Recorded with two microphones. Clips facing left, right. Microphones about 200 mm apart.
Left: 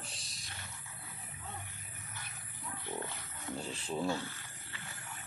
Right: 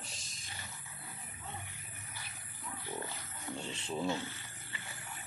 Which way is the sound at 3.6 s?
35° left (ahead or behind).